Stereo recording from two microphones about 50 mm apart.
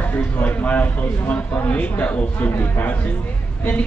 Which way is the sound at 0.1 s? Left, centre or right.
Left.